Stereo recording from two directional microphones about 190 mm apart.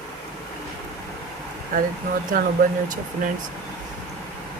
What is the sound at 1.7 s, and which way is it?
Speech, 45° right (ahead or behind).